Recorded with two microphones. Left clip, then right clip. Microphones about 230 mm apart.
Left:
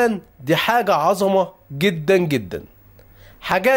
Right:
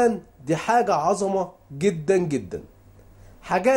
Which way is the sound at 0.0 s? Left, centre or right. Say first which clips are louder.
Left 2 dB; left.